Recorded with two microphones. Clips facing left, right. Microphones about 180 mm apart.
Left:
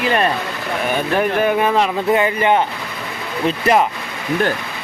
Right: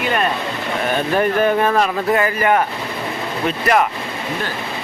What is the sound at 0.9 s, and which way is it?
Speech, 10° left (ahead or behind).